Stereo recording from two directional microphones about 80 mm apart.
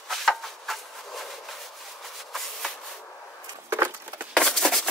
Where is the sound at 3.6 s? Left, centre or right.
Right.